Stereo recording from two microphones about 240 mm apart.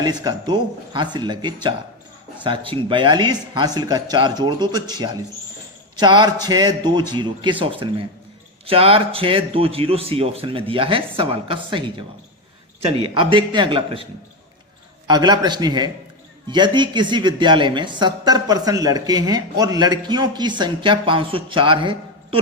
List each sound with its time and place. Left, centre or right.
0.0 s speech: centre
15.0 s speech: centre